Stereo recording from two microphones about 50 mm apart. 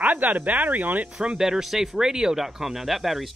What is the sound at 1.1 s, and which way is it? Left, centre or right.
Speech, centre.